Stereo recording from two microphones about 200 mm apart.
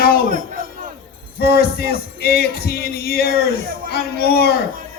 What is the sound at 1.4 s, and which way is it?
Speech, 50° left (ahead or behind).